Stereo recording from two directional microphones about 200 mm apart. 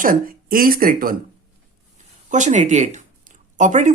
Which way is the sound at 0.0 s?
45° right (ahead or behind).